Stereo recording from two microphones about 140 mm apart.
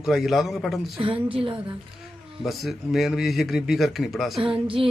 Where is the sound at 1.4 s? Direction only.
35° right (ahead or behind).